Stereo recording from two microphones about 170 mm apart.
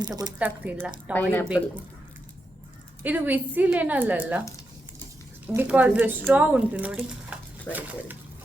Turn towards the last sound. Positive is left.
turn(degrees=15)  # may be behind; listen again after turning